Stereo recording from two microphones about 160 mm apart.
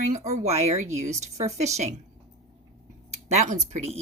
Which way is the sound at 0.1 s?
45° right (ahead or behind).